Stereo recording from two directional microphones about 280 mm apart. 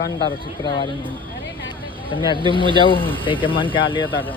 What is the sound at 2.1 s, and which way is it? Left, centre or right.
Speech, centre.